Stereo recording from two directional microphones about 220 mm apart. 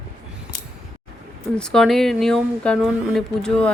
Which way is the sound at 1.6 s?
Centre (ahead or behind).